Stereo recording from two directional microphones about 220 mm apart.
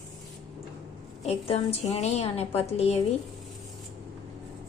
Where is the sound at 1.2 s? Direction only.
25° left (ahead or behind).